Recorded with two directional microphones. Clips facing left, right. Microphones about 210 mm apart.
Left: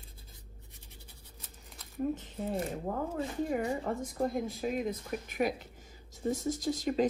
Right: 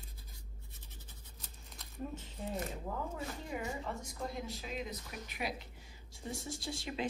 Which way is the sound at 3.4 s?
50° left (ahead or behind).